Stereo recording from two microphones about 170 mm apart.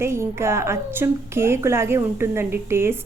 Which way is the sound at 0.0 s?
15° right (ahead or behind).